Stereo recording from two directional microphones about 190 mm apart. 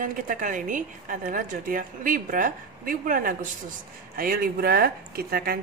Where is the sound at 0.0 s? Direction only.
45° right (ahead or behind).